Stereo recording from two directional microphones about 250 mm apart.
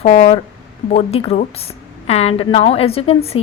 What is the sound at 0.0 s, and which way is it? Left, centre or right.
A woman's voice, left.